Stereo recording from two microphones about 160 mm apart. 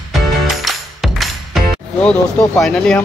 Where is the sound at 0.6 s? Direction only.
Centre (ahead or behind).